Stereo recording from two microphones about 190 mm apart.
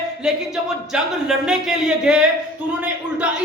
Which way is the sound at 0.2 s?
5° right (ahead or behind).